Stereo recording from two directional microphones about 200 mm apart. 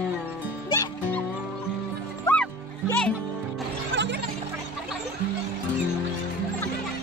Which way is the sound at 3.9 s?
65° right (ahead or behind).